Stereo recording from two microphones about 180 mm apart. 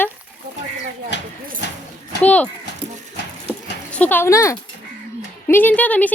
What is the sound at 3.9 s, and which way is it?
Speech, 10° left (ahead or behind).